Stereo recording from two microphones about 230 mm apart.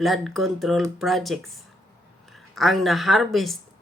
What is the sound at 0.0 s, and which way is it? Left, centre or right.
Speech, centre.